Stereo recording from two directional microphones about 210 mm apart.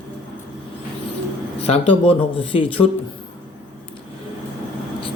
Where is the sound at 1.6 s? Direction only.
30° left (ahead or behind).